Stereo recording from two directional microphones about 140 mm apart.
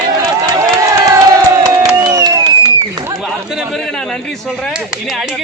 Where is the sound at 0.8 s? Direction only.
25° right (ahead or behind).